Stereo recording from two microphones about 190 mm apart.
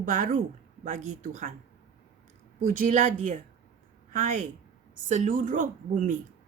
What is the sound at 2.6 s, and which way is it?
A woman's voice, 45° right (ahead or behind).